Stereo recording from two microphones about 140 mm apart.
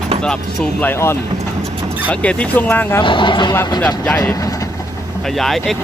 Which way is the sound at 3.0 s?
35° left (ahead or behind).